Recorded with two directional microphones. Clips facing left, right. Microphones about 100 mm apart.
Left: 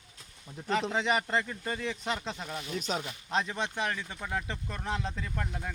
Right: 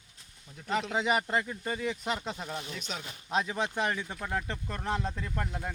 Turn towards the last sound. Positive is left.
turn(degrees=-5)  # may be behind; listen again after turning